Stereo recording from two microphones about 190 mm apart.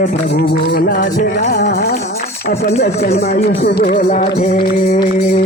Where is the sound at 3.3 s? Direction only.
55° left (ahead or behind).